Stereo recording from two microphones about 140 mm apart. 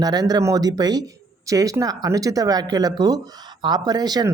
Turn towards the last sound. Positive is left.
turn(degrees=-30)  # may be behind; listen again after turning